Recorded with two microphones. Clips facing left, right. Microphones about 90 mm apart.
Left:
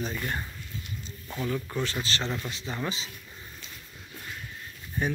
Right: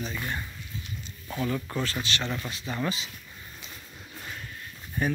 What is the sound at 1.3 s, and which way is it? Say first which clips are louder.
Speech: right 1 dB; 5° right (ahead or behind).